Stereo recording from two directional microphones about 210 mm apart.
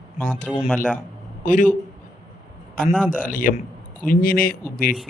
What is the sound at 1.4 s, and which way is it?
Speech, 35° left (ahead or behind).